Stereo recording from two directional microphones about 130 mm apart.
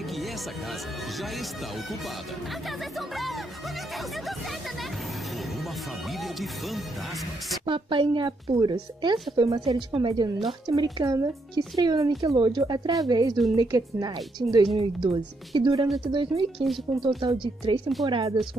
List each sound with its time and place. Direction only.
6.2 s speech: centre (ahead or behind)
7.6 s a woman's voice: 40° right (ahead or behind)